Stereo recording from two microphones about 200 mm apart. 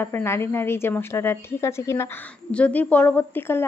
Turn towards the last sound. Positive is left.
turn(degrees=10)  # may be behind; listen again after turning